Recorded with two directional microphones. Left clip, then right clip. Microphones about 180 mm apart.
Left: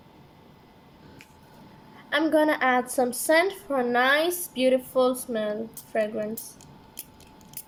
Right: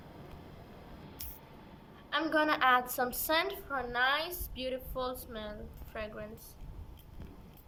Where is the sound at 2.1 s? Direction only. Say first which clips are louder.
Left 8 dB; 40° left (ahead or behind).